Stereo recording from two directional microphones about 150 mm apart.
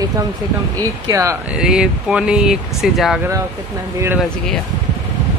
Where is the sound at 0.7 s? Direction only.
20° right (ahead or behind).